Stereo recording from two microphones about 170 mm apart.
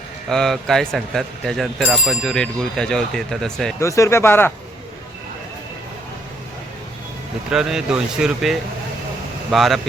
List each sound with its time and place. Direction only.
0.3 s speech: centre (ahead or behind)
3.8 s speech: 20° left (ahead or behind)
7.5 s speech: 5° right (ahead or behind)